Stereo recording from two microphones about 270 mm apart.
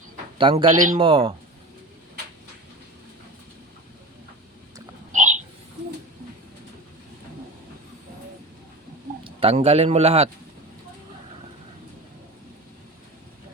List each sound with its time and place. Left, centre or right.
0.3 s speech: centre
5.1 s a sound: right
9.2 s speech: right